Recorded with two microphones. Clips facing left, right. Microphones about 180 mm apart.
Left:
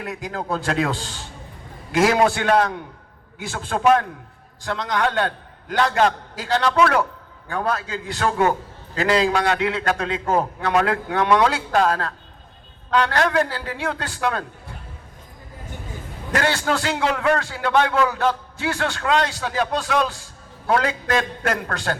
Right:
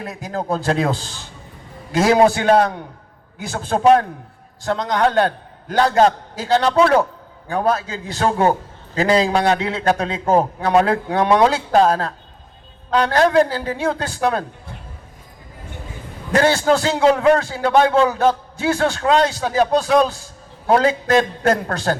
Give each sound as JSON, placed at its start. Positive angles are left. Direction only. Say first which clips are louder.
{"t": 0.0, "sound": "a man's voice", "louder": "right 3 dB", "side_deg": -35}
{"t": 4.6, "sound": "a man's voice", "louder": "right 5 dB", "side_deg": -40}
{"t": 16.3, "sound": "a man's voice", "louder": "right 6 dB", "side_deg": -25}